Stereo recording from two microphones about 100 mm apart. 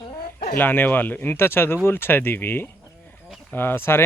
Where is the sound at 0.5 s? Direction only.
20° left (ahead or behind).